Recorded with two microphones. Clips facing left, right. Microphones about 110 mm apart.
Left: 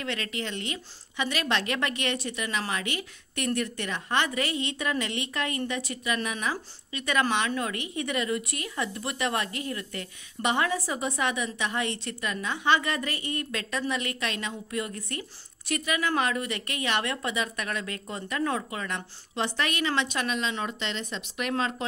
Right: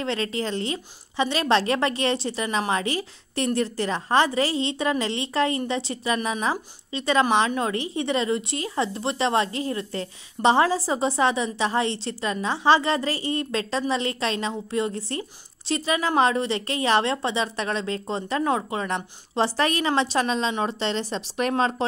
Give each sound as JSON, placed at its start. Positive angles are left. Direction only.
{"t": 0.0, "sound": "a woman's voice", "side_deg": -30}